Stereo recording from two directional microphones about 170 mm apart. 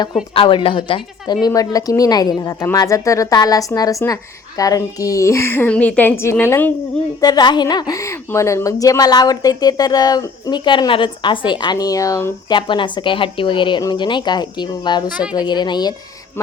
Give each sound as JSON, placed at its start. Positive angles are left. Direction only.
{"t": 0.3, "sound": "a woman's voice", "side_deg": 30}
{"t": 7.2, "sound": "a woman's voice", "side_deg": 25}